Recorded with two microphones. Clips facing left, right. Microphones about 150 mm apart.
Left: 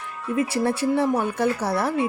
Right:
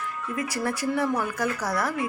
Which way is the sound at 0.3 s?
30° left (ahead or behind).